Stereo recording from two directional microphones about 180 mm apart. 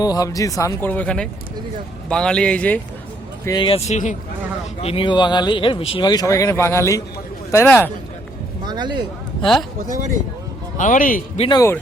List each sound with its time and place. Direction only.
0.0 s speech: 20° left (ahead or behind)
3.4 s speech: 25° left (ahead or behind); by 4.2 s 45° left (ahead or behind)
4.8 s speech: 30° left (ahead or behind); by 7.9 s 15° left (ahead or behind)
8.6 s speech: 25° right (ahead or behind)
9.4 s speech: centre (ahead or behind)
9.8 s speech: 45° right (ahead or behind)
10.8 s a man's voice: 45° left (ahead or behind)
11.3 s speech: 25° left (ahead or behind)